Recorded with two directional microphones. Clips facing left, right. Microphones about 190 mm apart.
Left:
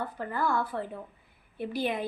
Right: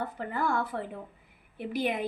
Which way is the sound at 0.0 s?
20° right (ahead or behind).